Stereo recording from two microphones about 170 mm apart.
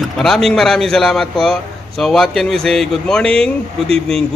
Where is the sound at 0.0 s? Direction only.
Centre (ahead or behind).